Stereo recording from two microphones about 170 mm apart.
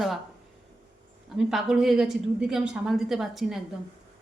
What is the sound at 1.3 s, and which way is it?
A woman's voice, 5° right (ahead or behind).